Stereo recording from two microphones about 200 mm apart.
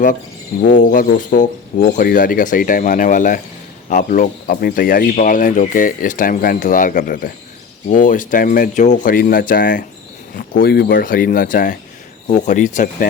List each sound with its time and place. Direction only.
0.6 s speech: 40° left (ahead or behind)